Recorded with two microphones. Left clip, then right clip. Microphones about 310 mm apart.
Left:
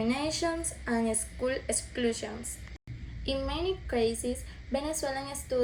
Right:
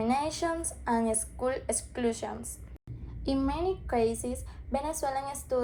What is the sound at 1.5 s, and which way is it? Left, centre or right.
Speech, right.